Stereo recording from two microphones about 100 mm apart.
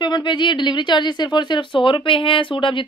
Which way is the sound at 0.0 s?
50° left (ahead or behind).